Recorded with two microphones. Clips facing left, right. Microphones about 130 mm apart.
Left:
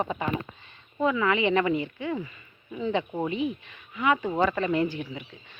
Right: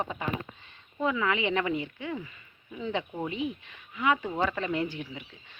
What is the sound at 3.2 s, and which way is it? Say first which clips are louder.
Speech: left 4 dB; 60° left (ahead or behind).